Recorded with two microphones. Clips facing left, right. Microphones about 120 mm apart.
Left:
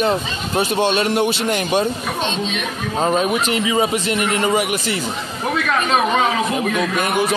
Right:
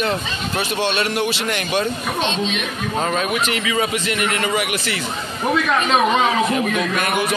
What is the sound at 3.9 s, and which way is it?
Speech, 35° left (ahead or behind).